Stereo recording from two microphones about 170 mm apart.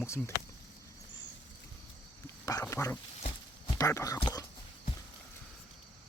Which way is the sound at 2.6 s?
15° left (ahead or behind).